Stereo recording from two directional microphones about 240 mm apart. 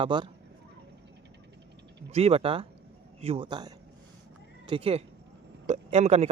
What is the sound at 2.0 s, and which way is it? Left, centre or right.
Speech, right.